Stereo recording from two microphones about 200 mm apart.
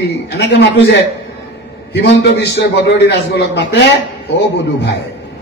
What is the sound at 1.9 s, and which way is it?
A man's voice, 60° left (ahead or behind).